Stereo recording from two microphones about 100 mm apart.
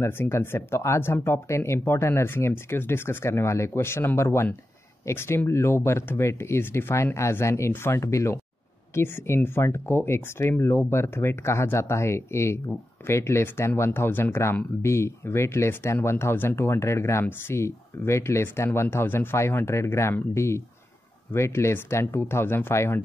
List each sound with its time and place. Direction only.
0.0 s speech: 25° left (ahead or behind)